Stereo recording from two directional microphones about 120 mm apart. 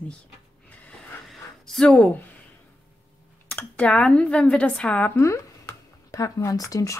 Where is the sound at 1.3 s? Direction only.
5° left (ahead or behind).